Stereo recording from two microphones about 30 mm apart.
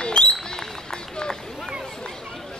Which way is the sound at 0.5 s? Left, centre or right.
Left.